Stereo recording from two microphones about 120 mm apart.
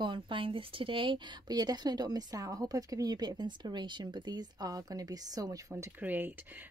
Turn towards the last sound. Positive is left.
turn(degrees=-15)  # may be behind; listen again after turning